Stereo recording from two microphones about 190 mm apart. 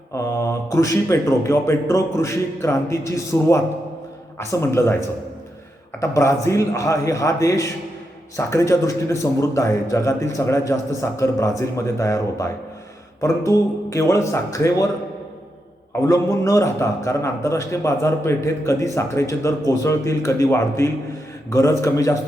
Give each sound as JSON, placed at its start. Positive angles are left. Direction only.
{"t": 0.1, "sound": "a man's voice", "side_deg": 15}
{"t": 16.0, "sound": "a man's voice", "side_deg": 15}